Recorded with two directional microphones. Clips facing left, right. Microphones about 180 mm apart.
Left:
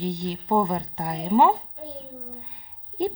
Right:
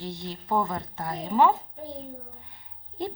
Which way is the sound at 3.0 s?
15° left (ahead or behind).